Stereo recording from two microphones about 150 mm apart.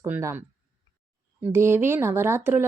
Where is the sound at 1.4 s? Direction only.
15° right (ahead or behind).